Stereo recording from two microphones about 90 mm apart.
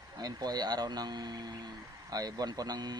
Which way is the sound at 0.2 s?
45° right (ahead or behind).